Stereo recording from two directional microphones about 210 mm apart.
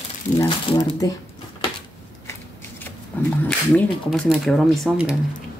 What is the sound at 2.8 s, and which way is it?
Roaring cats, 10° left (ahead or behind).